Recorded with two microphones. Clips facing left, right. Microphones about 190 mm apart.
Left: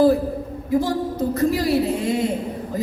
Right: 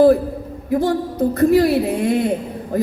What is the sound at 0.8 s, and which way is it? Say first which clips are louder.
A woman's voice: right 4 dB; 55° right (ahead or behind).